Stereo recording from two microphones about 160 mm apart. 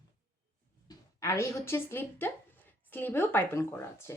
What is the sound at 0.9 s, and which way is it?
A woman's voice, 20° left (ahead or behind).